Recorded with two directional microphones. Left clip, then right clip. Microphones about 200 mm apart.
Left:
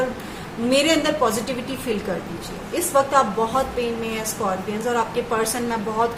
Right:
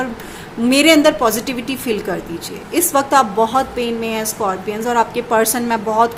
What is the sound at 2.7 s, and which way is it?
Speech, 50° right (ahead or behind).